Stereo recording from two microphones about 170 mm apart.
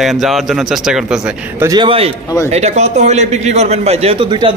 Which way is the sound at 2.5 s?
40° right (ahead or behind).